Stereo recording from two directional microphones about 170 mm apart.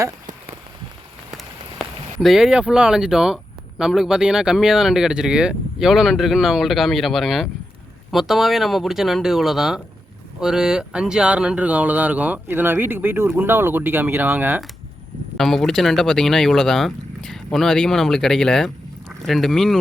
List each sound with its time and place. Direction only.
2.2 s speech: centre (ahead or behind)
15.4 s speech: centre (ahead or behind)